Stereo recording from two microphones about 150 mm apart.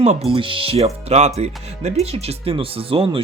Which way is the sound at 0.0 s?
45° right (ahead or behind).